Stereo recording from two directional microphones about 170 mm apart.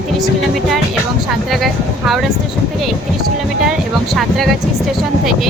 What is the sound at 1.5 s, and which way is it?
Speech, centre (ahead or behind).